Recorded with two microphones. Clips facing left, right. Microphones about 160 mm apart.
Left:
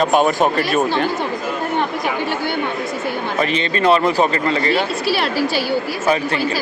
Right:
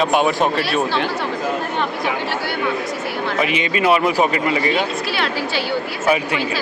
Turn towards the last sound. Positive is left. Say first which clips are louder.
# left 3 dB
turn(degrees=35)  # may be behind; listen again after turning